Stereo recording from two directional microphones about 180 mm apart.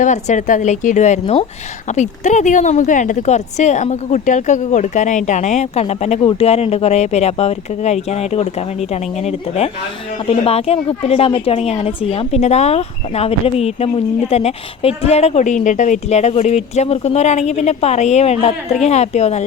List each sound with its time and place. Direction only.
0.0 s speech: 40° left (ahead or behind)